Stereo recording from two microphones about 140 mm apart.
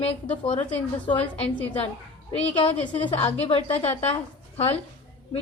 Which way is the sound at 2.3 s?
45° left (ahead or behind).